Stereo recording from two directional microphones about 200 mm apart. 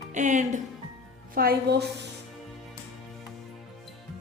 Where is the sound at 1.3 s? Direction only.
50° right (ahead or behind).